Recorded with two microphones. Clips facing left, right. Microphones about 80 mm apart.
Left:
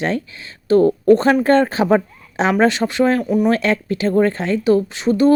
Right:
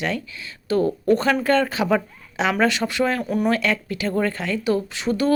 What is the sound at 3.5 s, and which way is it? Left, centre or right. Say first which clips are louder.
A woman's voice: left 5 dB; left.